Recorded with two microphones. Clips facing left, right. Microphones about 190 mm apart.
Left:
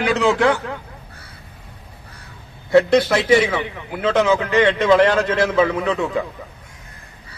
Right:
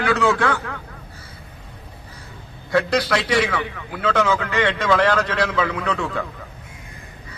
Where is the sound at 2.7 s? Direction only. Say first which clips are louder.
Left 6 dB; 25° left (ahead or behind).